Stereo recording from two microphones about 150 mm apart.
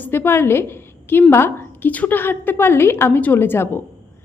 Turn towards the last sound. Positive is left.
turn(degrees=15)  # may be behind; listen again after turning